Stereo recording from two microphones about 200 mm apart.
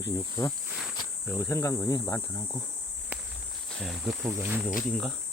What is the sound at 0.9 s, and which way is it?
Cricket, 15° left (ahead or behind).